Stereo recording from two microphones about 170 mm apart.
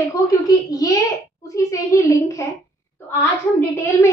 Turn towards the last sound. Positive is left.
turn(degrees=15)  # may be behind; listen again after turning